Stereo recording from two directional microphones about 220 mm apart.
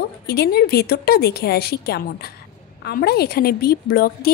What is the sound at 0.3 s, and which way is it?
A woman's voice, 45° left (ahead or behind).